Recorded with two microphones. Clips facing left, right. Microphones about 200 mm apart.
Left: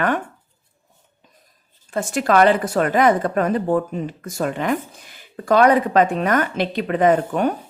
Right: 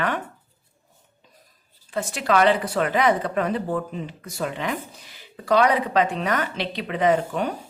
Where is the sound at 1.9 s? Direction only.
50° left (ahead or behind).